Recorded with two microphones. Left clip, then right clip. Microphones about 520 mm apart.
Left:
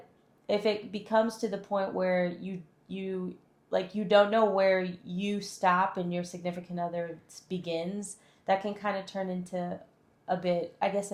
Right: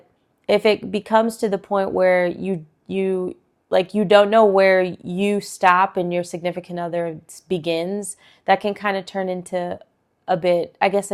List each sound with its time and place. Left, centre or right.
0.4 s speech: right